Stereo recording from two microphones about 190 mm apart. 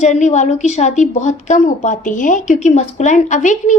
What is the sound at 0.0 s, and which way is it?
A woman's voice, 40° left (ahead or behind).